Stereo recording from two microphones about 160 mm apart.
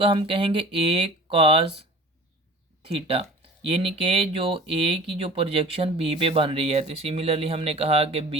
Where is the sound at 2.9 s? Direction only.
40° right (ahead or behind).